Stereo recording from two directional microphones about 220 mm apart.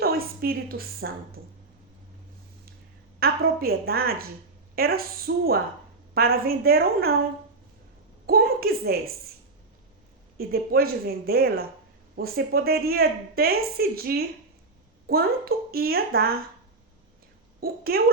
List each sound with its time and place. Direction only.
0.0 s a woman's voice: 45° right (ahead or behind)
3.2 s speech: 45° right (ahead or behind)
8.3 s speech: 45° right (ahead or behind)
10.3 s speech: 45° right (ahead or behind)
17.6 s a woman's voice: 45° right (ahead or behind)